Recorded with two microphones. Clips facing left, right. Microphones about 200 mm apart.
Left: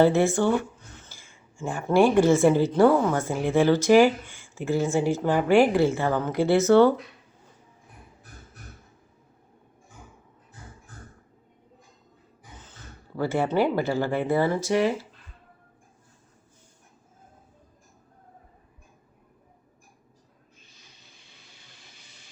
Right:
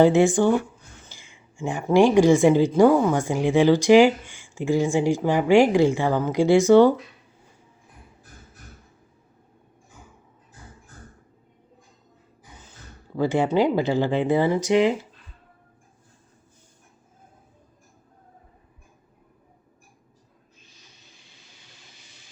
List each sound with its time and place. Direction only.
0.0 s a woman's voice: 15° right (ahead or behind)
13.1 s a woman's voice: 15° right (ahead or behind)